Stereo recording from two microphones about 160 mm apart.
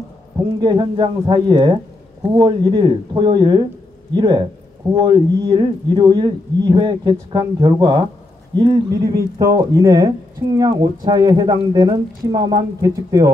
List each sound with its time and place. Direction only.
0.6 s speech: 30° right (ahead or behind)